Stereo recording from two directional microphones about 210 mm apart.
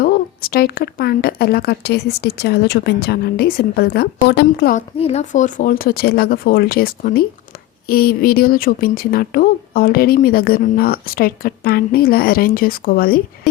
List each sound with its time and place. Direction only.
0.0 s a woman's voice: 45° left (ahead or behind)
4.9 s a woman's voice: 30° left (ahead or behind); by 13.5 s 45° left (ahead or behind)